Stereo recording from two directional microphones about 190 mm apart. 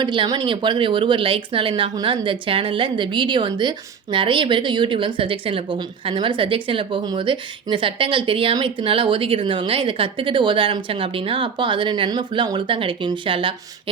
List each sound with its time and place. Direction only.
0.0 s speech: 25° right (ahead or behind)